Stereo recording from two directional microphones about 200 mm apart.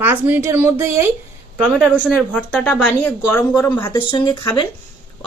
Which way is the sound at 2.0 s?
5° left (ahead or behind).